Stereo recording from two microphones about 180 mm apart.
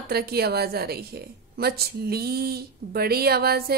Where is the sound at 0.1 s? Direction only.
60° right (ahead or behind).